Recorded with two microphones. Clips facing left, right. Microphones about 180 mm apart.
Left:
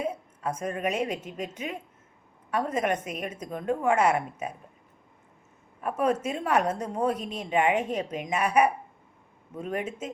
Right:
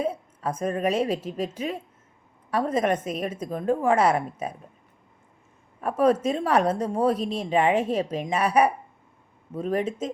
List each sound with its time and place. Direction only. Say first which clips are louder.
0.0 s a woman's voice: right 3 dB; 30° right (ahead or behind)
5.8 s a woman's voice: right 5 dB; 30° right (ahead or behind)